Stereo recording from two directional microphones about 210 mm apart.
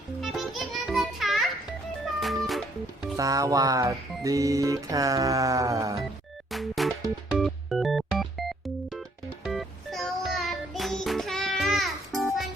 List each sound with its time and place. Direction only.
0.2 s music: centre (ahead or behind)
3.2 s speech: 15° right (ahead or behind)
6.5 s music: centre (ahead or behind)